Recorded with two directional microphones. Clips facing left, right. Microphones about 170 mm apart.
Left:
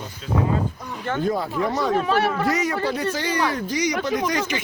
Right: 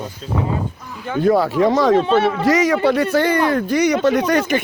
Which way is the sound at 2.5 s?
90° right.